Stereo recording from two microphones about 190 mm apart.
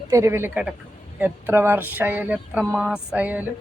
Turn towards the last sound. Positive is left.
turn(degrees=-10)  # may be behind; listen again after turning